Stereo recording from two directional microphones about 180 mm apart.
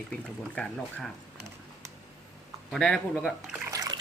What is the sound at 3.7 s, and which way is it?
Toilet flush, 20° right (ahead or behind).